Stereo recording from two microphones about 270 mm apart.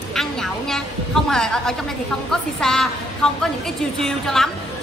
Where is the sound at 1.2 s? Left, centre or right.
Centre.